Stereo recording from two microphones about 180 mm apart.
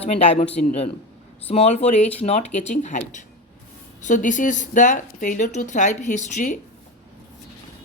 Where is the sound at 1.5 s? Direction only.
35° left (ahead or behind).